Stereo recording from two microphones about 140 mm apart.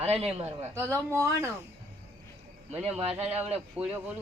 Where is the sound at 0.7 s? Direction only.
15° right (ahead or behind).